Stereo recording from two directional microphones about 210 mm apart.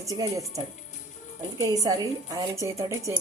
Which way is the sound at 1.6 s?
15° right (ahead or behind).